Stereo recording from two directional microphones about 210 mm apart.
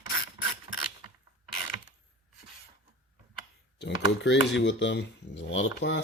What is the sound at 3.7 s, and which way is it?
Speech, 55° left (ahead or behind).